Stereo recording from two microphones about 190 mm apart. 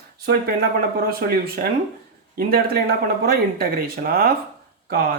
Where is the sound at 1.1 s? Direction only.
50° right (ahead or behind).